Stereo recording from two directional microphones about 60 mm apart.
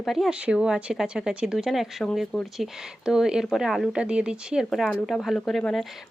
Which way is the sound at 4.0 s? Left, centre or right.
Centre.